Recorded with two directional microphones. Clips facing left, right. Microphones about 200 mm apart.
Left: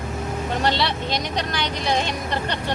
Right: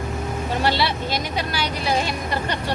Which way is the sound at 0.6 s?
5° right (ahead or behind).